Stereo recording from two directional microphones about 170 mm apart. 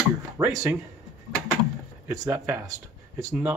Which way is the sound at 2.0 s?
15° right (ahead or behind).